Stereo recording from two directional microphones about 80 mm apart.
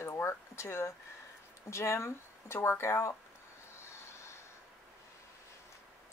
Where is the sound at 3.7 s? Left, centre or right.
Left.